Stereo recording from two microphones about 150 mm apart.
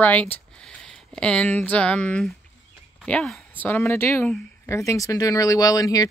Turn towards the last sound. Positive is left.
turn(degrees=25)  # may be behind; listen again after turning